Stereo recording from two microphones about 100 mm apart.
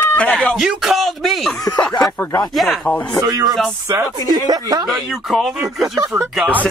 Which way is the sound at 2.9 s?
15° left (ahead or behind).